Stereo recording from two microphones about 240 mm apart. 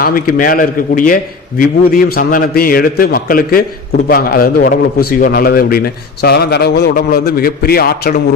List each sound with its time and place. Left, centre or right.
0.0 s a man's voice: left